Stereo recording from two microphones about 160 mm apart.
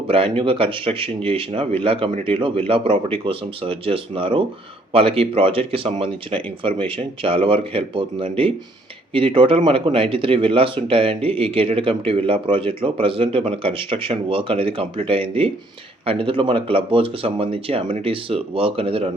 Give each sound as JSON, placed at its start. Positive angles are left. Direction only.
{"t": 0.1, "sound": "speech", "side_deg": -35}